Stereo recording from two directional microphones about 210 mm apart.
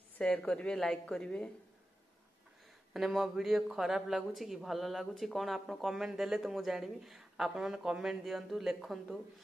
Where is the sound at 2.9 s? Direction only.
Centre (ahead or behind).